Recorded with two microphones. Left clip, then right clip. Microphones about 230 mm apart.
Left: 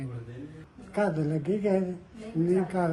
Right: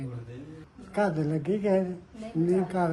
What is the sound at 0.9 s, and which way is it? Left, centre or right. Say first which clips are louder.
A woman's voice: right 1 dB; centre.